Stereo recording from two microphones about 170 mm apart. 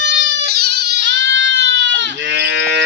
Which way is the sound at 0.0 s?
70° right (ahead or behind).